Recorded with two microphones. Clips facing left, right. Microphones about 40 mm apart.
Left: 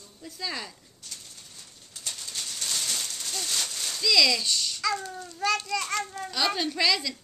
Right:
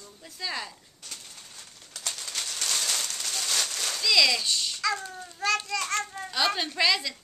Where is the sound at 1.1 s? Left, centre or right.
Right.